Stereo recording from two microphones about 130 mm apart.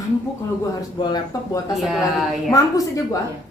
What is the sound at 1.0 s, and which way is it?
Speech, 30° left (ahead or behind).